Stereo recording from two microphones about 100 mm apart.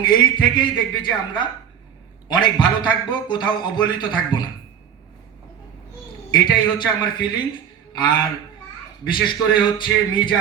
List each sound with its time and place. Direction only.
0.0 s a man's voice: 50° left (ahead or behind)
6.3 s a man's voice: 45° left (ahead or behind)